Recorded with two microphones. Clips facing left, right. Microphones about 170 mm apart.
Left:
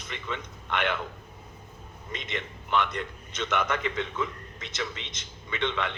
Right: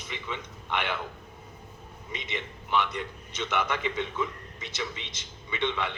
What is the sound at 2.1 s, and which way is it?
A man's voice, 10° right (ahead or behind).